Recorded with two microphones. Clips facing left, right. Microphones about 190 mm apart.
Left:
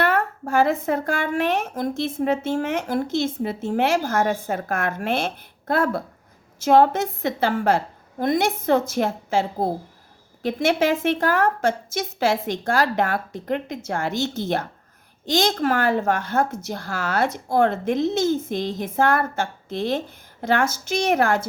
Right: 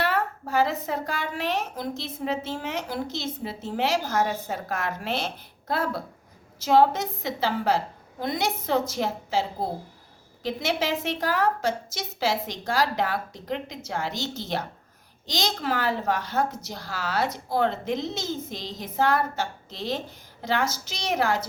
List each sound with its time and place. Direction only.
0.0 s speech: 50° left (ahead or behind)